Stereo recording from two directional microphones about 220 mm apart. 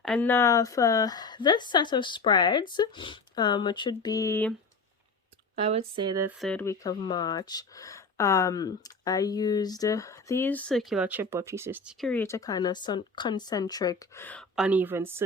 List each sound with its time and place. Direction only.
0.0 s a woman's voice: 5° left (ahead or behind)
5.5 s speech: 25° right (ahead or behind)
6.2 s speech: 5° left (ahead or behind)
11.9 s speech: 5° left (ahead or behind); by 15.2 s 10° right (ahead or behind)